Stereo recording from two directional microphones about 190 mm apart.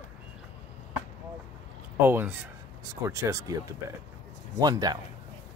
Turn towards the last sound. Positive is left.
turn(degrees=-20)  # may be behind; listen again after turning